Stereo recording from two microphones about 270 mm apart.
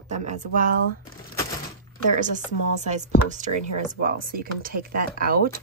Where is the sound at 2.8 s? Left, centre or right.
Right.